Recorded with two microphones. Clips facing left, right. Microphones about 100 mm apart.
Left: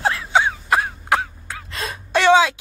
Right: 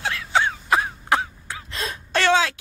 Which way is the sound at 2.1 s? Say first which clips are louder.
Left 5 dB; 15° left (ahead or behind).